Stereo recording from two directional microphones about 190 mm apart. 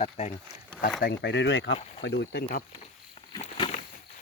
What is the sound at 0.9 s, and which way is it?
Speech, 65° left (ahead or behind).